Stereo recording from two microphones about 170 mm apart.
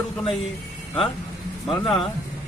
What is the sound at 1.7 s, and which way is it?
Speech, 35° left (ahead or behind).